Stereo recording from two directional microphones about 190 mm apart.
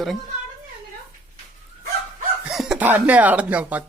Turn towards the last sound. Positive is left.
turn(degrees=-10)  # may be behind; listen again after turning